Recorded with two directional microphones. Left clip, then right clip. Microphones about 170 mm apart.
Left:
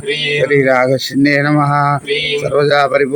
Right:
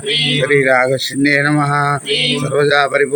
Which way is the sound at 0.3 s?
35° left (ahead or behind).